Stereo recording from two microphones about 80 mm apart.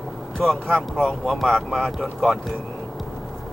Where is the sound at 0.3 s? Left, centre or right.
Centre.